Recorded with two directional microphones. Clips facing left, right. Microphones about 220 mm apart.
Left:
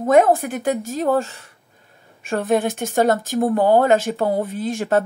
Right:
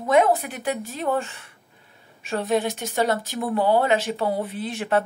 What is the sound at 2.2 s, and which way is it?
Speech, 50° left (ahead or behind).